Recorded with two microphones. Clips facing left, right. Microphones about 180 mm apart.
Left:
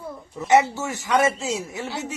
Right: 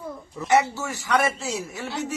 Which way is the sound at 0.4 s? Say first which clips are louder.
Left 3 dB; 20° left (ahead or behind).